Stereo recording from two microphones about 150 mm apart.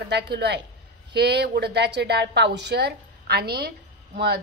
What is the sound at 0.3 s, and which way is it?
A woman's voice, 90° right.